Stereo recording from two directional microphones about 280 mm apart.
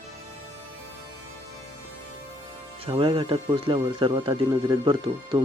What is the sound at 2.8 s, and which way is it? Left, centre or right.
Speech, centre.